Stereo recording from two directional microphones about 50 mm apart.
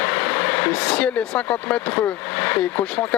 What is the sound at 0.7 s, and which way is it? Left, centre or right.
Speech, left.